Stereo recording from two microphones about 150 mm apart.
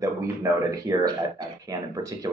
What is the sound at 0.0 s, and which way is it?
Speech, 20° right (ahead or behind).